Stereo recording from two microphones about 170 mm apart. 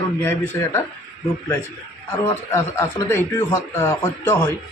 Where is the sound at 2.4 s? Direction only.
15° left (ahead or behind).